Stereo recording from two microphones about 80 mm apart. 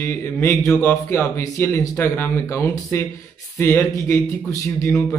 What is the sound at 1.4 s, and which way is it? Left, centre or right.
Speech, left.